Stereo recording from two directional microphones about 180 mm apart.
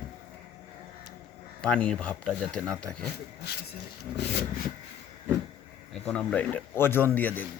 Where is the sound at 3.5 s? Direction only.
65° left (ahead or behind).